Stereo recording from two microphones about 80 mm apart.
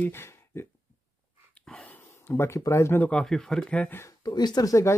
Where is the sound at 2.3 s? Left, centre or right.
Left.